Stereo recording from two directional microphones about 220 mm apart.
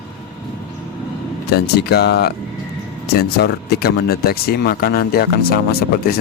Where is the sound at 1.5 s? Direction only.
45° left (ahead or behind).